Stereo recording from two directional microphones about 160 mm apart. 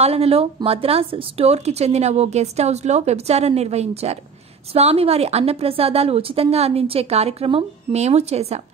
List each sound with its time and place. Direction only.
0.0 s a woman's voice: 40° right (ahead or behind)